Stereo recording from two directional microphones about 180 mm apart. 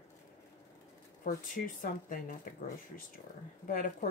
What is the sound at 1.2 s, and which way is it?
Speech, 50° left (ahead or behind).